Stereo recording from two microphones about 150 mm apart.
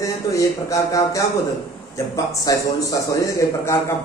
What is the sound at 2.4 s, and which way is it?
A man's voice, 25° left (ahead or behind).